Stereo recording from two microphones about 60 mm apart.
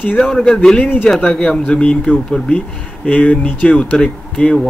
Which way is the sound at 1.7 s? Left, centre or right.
Centre.